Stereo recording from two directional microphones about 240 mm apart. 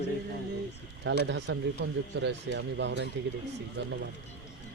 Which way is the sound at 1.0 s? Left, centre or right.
Right.